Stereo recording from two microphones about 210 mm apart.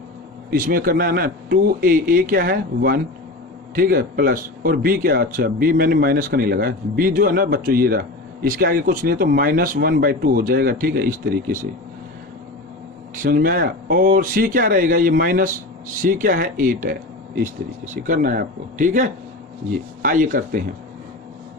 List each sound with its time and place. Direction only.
0.5 s speech: 40° right (ahead or behind)
13.1 s speech: 40° right (ahead or behind)